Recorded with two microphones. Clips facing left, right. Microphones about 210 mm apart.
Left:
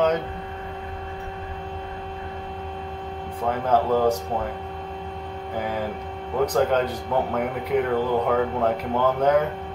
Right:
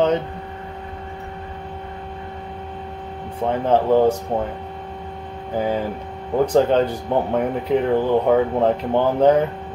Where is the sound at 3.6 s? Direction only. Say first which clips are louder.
Right 4 dB; 30° right (ahead or behind).